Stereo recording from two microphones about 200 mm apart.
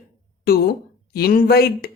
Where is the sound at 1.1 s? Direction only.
50° left (ahead or behind).